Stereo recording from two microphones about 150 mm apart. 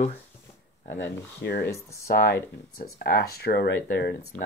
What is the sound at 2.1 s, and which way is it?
Speech, 90° left.